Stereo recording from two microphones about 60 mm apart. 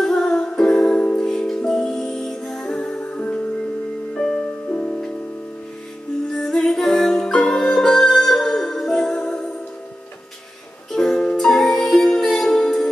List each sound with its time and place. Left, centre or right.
0.0 s music: centre
4.6 s music: left
6.3 s music: centre
10.9 s music: centre